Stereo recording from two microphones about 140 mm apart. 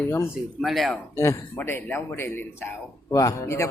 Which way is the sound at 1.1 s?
20° left (ahead or behind).